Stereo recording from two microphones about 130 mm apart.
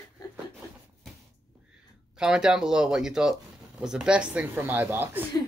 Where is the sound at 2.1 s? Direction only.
5° right (ahead or behind).